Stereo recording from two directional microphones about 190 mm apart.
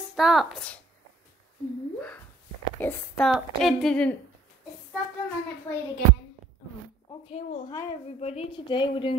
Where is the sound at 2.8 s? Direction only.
5° left (ahead or behind).